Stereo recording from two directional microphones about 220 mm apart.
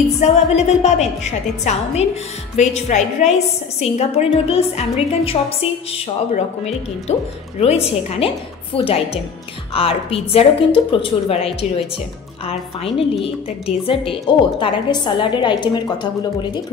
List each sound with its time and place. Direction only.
0.2 s a woman's voice: 30° left (ahead or behind)